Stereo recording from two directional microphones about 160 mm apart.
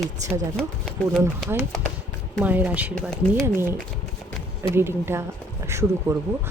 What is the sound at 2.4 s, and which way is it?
Speech, 10° right (ahead or behind).